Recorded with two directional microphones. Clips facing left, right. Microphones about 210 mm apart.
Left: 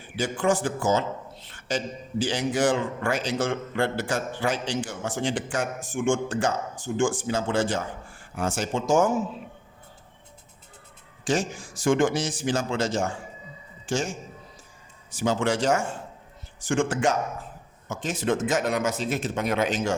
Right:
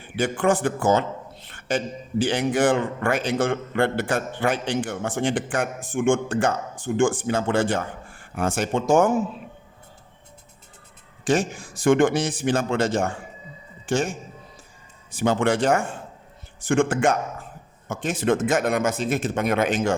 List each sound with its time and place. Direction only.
0.2 s a man's voice: 60° right (ahead or behind)
11.3 s a man's voice: 60° right (ahead or behind)